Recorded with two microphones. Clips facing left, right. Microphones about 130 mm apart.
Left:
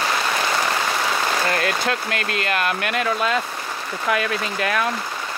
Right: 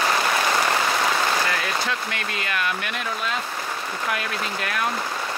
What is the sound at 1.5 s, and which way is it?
Speech, 65° left (ahead or behind).